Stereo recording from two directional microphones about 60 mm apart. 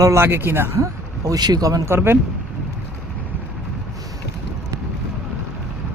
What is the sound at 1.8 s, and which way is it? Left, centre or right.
Speech, right.